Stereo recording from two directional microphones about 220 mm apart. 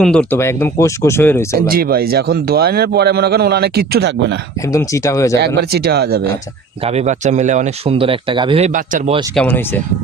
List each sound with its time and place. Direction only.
0.0 s speech: 5° left (ahead or behind)
1.5 s a man's voice: 40° right (ahead or behind)
4.6 s speech: 15° left (ahead or behind)
5.7 s a man's voice: 45° right (ahead or behind)
6.8 s speech: 30° right (ahead or behind)
9.3 s speech: 5° left (ahead or behind)